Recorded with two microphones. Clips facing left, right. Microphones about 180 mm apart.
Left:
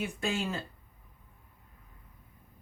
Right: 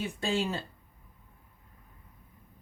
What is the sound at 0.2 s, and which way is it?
Speech, 30° right (ahead or behind).